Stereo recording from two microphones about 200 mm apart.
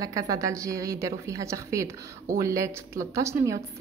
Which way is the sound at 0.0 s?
15° right (ahead or behind).